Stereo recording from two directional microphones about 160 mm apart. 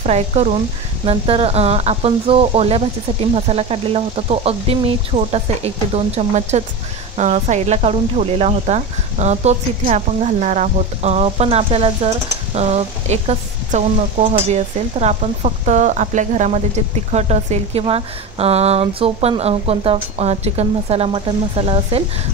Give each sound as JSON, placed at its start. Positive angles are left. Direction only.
{"t": 0.0, "sound": "speech", "side_deg": -45}